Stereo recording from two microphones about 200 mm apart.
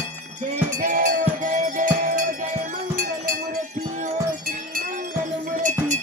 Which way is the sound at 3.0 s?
45° right (ahead or behind).